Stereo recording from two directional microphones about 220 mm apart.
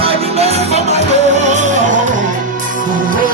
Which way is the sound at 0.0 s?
25° right (ahead or behind).